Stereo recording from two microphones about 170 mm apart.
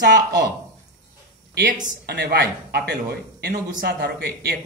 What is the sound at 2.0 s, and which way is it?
A man's voice, 80° right.